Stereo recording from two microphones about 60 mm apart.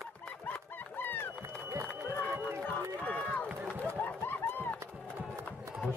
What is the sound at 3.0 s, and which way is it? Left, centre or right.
Run, left.